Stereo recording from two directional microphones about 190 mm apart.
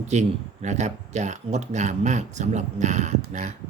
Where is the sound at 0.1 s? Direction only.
40° right (ahead or behind).